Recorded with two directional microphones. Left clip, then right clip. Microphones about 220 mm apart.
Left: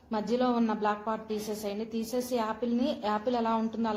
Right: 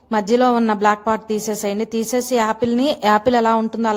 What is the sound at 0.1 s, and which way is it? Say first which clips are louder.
A woman's voice: right 13 dB; 45° right (ahead or behind).